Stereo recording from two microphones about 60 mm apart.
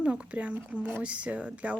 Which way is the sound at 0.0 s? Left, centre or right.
Centre.